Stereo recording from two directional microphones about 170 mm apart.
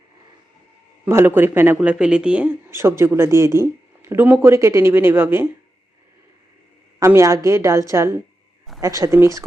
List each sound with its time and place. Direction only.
1.0 s speech: 15° right (ahead or behind)
7.0 s speech: 15° right (ahead or behind)